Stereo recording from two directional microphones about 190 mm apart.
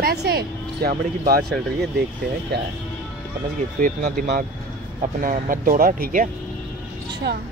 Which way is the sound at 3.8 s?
45° right (ahead or behind).